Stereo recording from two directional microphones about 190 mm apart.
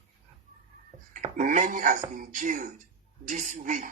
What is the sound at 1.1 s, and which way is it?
Speech, 40° right (ahead or behind).